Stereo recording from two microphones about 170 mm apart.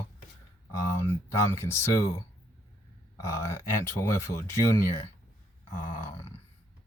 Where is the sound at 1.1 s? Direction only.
15° left (ahead or behind).